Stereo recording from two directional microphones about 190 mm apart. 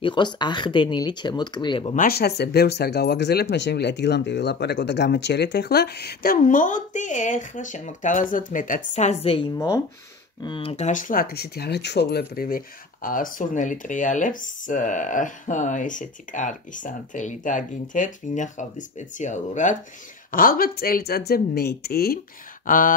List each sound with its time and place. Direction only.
0.0 s speech: 25° left (ahead or behind)
2.0 s speech: 55° left (ahead or behind)